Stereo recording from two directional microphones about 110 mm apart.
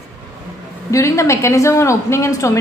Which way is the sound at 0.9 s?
30° left (ahead or behind).